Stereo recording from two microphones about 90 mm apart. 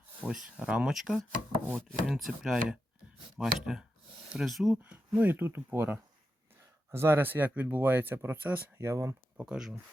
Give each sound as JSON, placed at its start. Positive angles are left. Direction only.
{"t": 0.2, "sound": "speech", "side_deg": -10}
{"t": 1.7, "sound": "chopping", "side_deg": 0}
{"t": 4.8, "sound": "speech", "side_deg": -15}
{"t": 8.8, "sound": "speech", "side_deg": -35}
{"t": 9.5, "sound": "chopping", "side_deg": -5}